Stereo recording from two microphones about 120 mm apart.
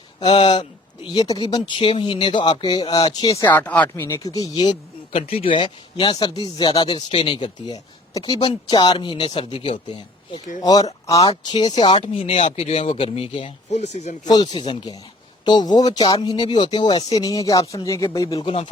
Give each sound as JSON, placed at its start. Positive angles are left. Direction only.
{"t": 0.3, "sound": "speech", "side_deg": 45}
{"t": 3.7, "sound": "speech", "side_deg": 15}
{"t": 10.6, "sound": "speech", "side_deg": 35}
{"t": 14.3, "sound": "speech", "side_deg": 35}
{"t": 18.3, "sound": "speech", "side_deg": 45}